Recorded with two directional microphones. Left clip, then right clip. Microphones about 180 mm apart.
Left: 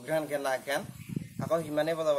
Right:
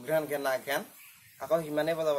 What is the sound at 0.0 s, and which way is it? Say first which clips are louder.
Speech: right 1 dB; 5° left (ahead or behind).